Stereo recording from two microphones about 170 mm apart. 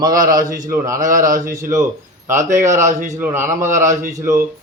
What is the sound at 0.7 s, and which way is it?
Speech, 20° right (ahead or behind).